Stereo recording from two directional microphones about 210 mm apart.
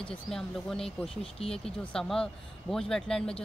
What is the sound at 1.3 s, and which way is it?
Speech, 25° left (ahead or behind).